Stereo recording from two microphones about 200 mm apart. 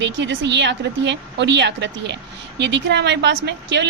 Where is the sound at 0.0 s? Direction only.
65° right (ahead or behind).